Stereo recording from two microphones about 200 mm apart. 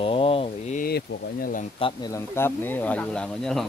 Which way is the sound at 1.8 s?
25° left (ahead or behind).